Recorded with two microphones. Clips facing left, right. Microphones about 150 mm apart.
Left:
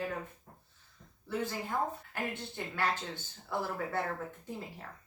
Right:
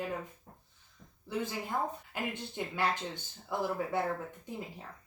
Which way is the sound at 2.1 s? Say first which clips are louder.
Right 1 dB; 15° right (ahead or behind).